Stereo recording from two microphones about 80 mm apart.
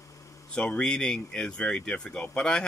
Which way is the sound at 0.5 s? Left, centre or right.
Centre.